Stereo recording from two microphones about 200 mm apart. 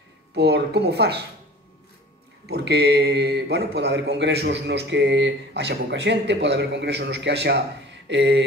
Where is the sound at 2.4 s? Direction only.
55° right (ahead or behind).